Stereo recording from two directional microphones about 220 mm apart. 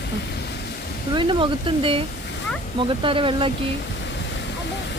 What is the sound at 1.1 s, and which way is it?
A woman's voice, 20° right (ahead or behind).